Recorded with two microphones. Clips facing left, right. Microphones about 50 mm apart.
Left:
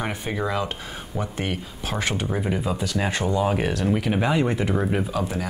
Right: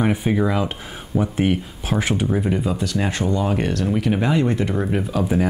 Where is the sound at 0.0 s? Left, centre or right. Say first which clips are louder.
Right 7 dB; centre.